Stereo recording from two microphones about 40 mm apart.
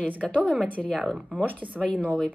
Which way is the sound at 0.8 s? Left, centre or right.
Left.